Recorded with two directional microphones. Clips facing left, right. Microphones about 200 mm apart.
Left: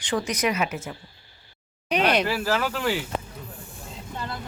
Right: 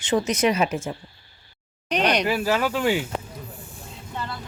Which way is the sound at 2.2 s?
15° right (ahead or behind).